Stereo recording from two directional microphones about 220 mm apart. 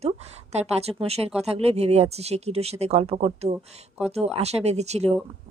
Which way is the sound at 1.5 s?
30° right (ahead or behind).